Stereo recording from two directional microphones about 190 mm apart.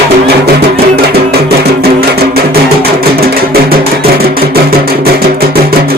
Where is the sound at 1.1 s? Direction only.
55° right (ahead or behind).